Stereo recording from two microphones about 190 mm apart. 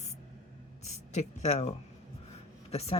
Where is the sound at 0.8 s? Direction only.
35° left (ahead or behind).